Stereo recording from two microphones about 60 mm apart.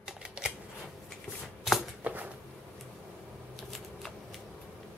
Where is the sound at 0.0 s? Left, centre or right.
Centre.